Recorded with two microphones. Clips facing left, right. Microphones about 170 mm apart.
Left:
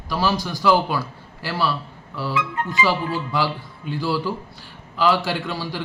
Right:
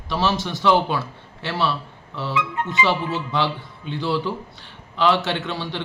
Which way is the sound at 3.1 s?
25° right (ahead or behind).